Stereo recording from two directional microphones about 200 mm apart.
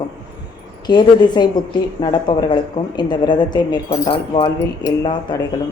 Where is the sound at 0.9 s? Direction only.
20° left (ahead or behind).